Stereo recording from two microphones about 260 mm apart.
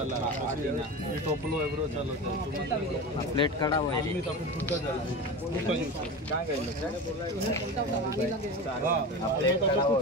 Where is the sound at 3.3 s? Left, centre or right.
Centre.